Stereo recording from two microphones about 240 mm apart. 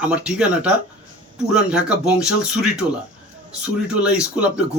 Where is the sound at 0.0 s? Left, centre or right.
Centre.